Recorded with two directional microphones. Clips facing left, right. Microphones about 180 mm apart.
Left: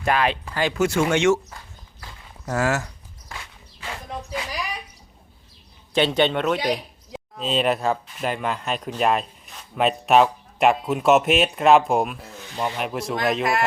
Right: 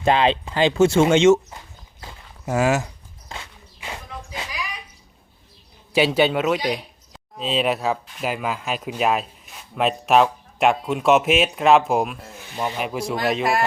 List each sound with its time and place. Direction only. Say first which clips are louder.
0.0 s speech: right 4 dB; 25° right (ahead or behind)
2.0 s walk: right 2 dB; 20° right (ahead or behind)
5.9 s speech: right 2 dB; 5° right (ahead or behind)